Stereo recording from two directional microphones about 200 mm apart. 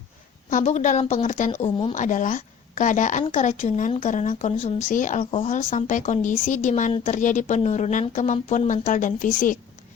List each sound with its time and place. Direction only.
0.5 s speech: 35° left (ahead or behind)